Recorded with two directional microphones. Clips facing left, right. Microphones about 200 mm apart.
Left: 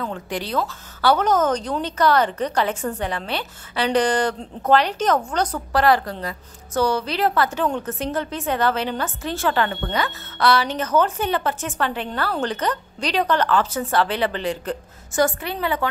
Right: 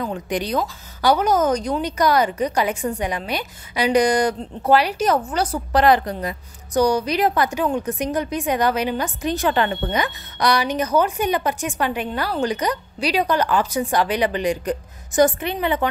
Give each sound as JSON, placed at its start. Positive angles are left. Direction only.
{"t": 0.0, "sound": "a woman's voice", "side_deg": -15}
{"t": 5.7, "sound": "a woman's voice", "side_deg": -20}